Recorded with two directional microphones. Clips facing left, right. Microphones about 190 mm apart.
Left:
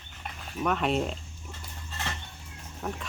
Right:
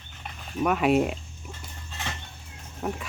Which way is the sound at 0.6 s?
5° right (ahead or behind).